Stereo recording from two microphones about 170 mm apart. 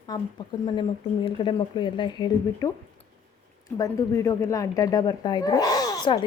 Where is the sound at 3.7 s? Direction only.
20° left (ahead or behind).